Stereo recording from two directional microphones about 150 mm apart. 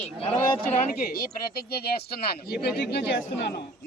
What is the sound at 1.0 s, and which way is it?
Speech, 80° left.